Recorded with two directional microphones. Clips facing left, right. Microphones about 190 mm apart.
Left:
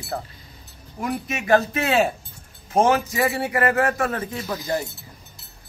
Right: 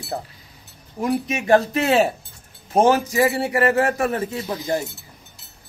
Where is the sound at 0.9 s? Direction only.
30° right (ahead or behind).